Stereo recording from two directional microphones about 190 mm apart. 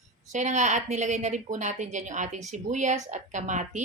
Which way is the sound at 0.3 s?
40° right (ahead or behind).